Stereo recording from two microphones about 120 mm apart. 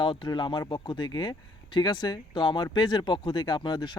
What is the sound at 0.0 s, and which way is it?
Speech, 40° left (ahead or behind).